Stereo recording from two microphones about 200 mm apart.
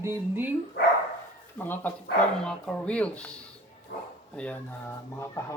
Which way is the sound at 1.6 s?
10° left (ahead or behind).